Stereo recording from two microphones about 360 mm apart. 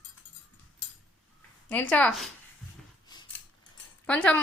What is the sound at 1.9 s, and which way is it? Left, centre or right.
Speech, centre.